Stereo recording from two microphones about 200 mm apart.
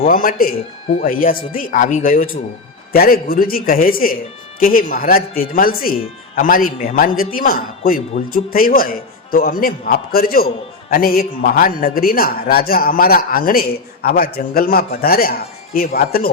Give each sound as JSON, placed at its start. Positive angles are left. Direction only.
{"t": 0.0, "sound": "a man's voice", "side_deg": 45}